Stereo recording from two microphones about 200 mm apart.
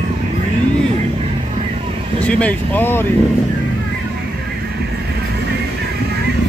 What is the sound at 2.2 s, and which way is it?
Speech, 5° left (ahead or behind).